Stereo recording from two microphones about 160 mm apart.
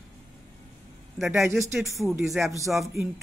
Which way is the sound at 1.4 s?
15° right (ahead or behind).